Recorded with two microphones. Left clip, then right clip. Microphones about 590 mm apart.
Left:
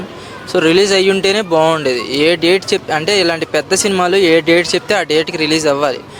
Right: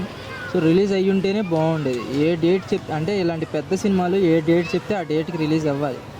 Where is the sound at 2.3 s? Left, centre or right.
Left.